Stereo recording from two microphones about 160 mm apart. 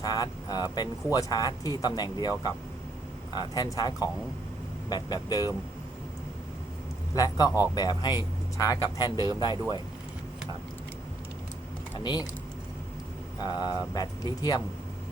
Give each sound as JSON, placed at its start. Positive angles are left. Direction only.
{"t": 0.0, "sound": "speech", "side_deg": 25}
{"t": 3.3, "sound": "speech", "side_deg": 25}
{"t": 7.2, "sound": "speech", "side_deg": 25}
{"t": 11.9, "sound": "speech", "side_deg": 25}
{"t": 13.4, "sound": "speech", "side_deg": 25}